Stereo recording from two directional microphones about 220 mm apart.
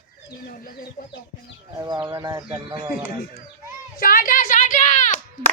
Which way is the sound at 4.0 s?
40° left (ahead or behind).